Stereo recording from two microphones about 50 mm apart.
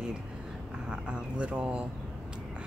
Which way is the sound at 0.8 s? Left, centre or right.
Centre.